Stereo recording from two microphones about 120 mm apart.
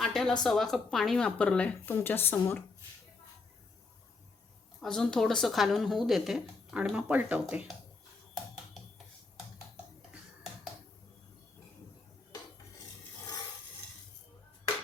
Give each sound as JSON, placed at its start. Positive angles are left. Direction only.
{"t": 0.0, "sound": "a sound", "side_deg": 0}
{"t": 0.4, "sound": "speech", "side_deg": 0}
{"t": 4.8, "sound": "speech", "side_deg": 5}